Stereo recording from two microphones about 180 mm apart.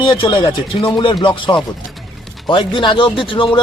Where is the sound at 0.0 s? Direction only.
30° left (ahead or behind).